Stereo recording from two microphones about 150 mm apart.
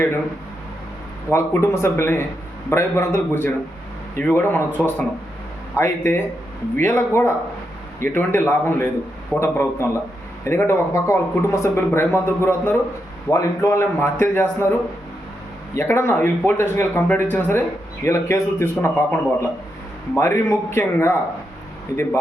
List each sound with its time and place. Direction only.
1.3 s speech: 20° left (ahead or behind)
15.7 s speech: 15° left (ahead or behind)